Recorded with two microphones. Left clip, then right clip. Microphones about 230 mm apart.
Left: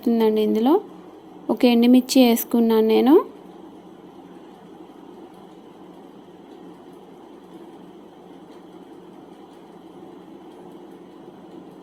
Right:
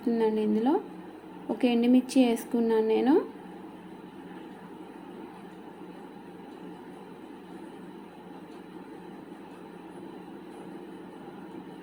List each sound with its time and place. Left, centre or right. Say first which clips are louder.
0.0 s speech: left 8 dB; left